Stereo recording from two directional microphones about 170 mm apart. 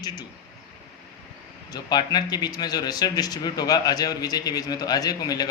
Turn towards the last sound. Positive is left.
turn(degrees=20)  # may be behind; listen again after turning